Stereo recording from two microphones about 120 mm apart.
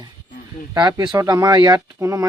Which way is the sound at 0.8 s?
35° right (ahead or behind).